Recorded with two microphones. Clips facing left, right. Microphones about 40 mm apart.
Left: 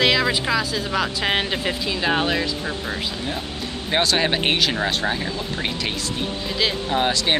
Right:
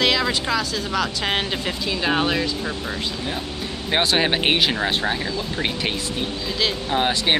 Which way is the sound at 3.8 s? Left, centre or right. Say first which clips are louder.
Even; centre.